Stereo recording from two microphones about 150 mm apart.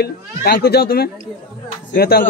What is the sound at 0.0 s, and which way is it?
Speech, 90° left.